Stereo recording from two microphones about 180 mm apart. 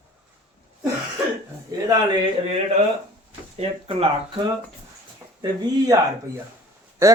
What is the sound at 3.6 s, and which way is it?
Speech, 30° right (ahead or behind).